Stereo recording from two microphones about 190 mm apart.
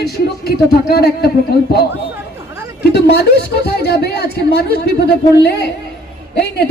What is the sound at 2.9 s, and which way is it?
A man's voice, 60° left (ahead or behind).